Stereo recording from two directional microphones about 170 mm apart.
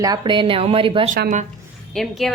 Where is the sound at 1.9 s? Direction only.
Centre (ahead or behind).